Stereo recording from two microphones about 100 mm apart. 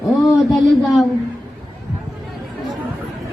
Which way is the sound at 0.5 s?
Centre (ahead or behind).